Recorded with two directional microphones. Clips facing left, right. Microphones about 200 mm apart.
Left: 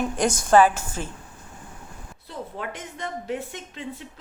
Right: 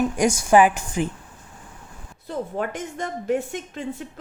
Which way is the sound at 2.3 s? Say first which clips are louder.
Right 7 dB; 45° right (ahead or behind).